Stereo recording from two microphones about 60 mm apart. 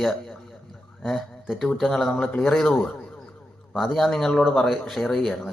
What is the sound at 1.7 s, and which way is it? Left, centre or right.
Speech, centre.